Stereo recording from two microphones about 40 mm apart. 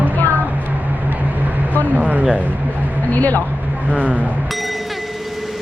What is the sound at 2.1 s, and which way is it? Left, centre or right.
Speech, right.